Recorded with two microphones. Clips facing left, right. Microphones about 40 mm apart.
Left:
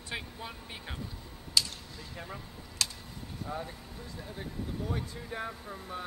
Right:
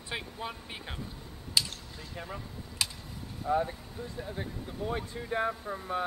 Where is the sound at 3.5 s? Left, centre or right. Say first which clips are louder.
Right 11 dB; right.